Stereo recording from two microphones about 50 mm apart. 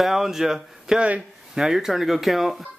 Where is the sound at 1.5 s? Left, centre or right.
Centre.